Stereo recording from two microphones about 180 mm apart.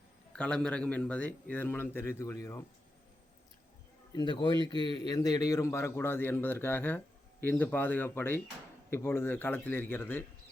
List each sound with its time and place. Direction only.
0.3 s a man's voice: 5° left (ahead or behind)
4.1 s a man's voice: 25° left (ahead or behind)